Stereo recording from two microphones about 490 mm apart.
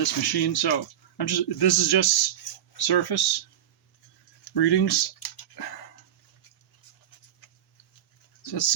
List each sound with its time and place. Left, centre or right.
0.0 s speech: left
4.5 s speech: left
8.4 s speech: left